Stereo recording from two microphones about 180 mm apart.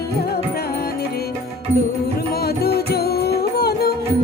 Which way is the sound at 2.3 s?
60° left (ahead or behind).